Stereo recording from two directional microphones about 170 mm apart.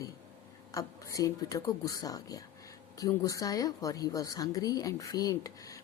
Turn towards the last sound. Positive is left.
turn(degrees=20)  # may be behind; listen again after turning